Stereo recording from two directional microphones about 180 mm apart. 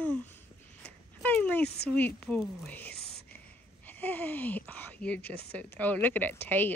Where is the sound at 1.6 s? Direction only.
65° left (ahead or behind).